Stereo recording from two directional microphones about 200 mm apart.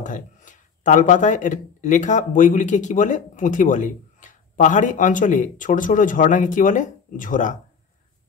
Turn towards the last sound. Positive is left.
turn(degrees=40)  # may be behind; listen again after turning